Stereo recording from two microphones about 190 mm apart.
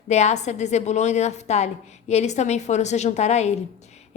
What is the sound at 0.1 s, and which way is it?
A woman's voice, 35° left (ahead or behind).